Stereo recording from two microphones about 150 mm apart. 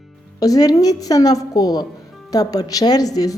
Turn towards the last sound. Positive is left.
turn(degrees=25)  # may be behind; listen again after turning